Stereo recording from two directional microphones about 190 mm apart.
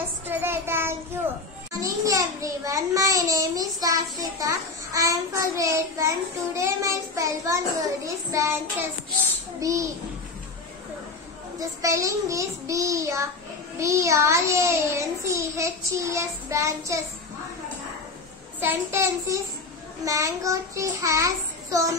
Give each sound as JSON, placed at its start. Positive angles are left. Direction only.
{"t": 0.3, "sound": "child singing", "side_deg": -10}
{"t": 1.8, "sound": "a child's voice", "side_deg": -15}
{"t": 11.8, "sound": "a child's voice", "side_deg": -15}
{"t": 18.6, "sound": "a child's voice", "side_deg": -10}